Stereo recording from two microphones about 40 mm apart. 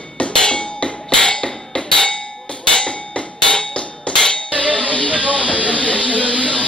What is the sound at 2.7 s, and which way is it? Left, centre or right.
Clang, left.